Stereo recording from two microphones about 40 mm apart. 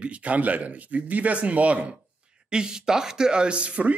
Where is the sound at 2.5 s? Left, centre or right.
Centre.